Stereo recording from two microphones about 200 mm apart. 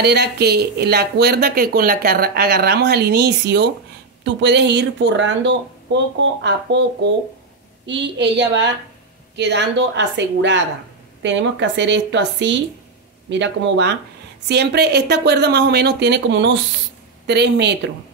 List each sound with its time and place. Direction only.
0.0 s speech: 55° right (ahead or behind)